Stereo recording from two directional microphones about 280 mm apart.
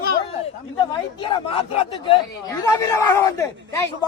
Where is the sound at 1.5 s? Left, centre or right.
Left.